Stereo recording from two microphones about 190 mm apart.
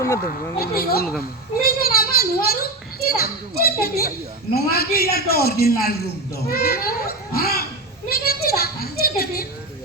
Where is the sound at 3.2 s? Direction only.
55° left (ahead or behind).